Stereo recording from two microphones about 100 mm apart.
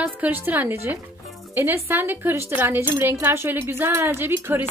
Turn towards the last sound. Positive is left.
turn(degrees=-20)  # may be behind; listen again after turning